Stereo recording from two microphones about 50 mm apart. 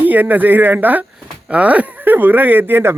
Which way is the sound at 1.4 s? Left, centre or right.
Right.